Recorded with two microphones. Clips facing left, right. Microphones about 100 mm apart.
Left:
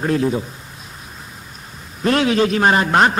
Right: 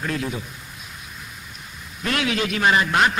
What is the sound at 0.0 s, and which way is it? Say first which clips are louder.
Speech: left 9 dB; 35° left (ahead or behind).